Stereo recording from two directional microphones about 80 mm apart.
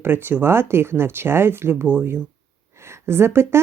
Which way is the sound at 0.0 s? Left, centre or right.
Right.